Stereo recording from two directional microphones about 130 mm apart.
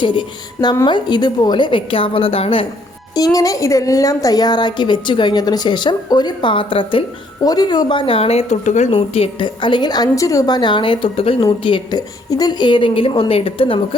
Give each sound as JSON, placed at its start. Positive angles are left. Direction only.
{"t": 0.0, "sound": "a woman's voice", "side_deg": 40}
{"t": 3.2, "sound": "a woman's voice", "side_deg": 25}
{"t": 7.4, "sound": "speech", "side_deg": 30}
{"t": 8.9, "sound": "a woman's voice", "side_deg": 45}